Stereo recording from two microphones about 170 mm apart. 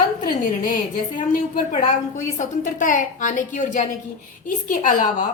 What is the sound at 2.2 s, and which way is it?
A woman's voice, 45° left (ahead or behind).